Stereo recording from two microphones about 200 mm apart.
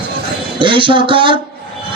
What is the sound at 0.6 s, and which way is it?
Music, 25° right (ahead or behind).